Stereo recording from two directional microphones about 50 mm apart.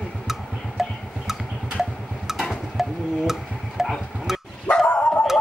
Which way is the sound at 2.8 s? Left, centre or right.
Centre.